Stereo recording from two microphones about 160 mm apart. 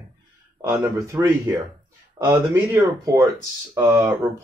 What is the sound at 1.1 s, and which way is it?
Speech, 20° right (ahead or behind).